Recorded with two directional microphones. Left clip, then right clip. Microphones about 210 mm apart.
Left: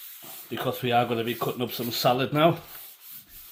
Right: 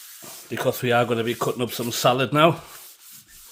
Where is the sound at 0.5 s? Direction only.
55° right (ahead or behind).